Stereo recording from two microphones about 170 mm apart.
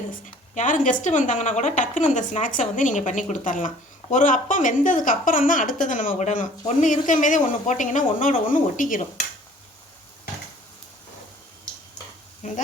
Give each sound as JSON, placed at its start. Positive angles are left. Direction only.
{"t": 0.1, "sound": "a woman's voice", "side_deg": 50}